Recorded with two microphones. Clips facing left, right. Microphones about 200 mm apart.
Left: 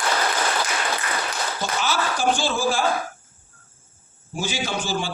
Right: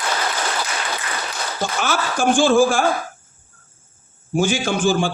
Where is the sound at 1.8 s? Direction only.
50° right (ahead or behind).